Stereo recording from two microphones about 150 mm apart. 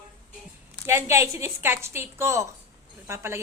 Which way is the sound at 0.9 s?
20° right (ahead or behind).